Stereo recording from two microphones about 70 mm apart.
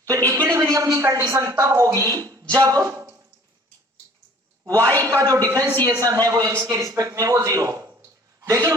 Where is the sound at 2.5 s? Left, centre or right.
Right.